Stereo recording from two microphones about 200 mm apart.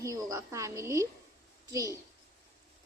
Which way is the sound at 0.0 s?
15° right (ahead or behind).